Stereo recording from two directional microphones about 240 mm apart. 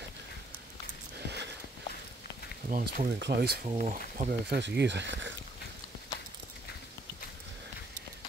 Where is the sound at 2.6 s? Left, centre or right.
Right.